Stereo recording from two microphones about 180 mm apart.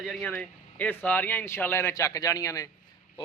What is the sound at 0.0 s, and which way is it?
A man's voice, centre (ahead or behind).